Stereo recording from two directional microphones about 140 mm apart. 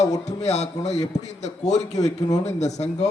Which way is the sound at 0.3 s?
50° left (ahead or behind).